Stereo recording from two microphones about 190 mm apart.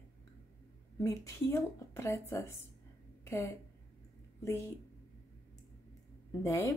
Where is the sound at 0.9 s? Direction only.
15° left (ahead or behind).